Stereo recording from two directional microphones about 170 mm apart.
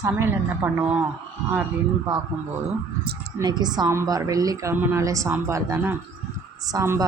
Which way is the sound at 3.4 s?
25° right (ahead or behind).